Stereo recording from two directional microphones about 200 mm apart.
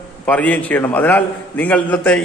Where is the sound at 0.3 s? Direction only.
5° left (ahead or behind).